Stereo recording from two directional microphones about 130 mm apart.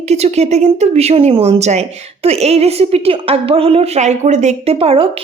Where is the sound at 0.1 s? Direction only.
55° right (ahead or behind).